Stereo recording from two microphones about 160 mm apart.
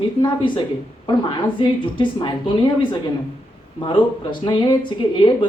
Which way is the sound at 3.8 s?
30° left (ahead or behind).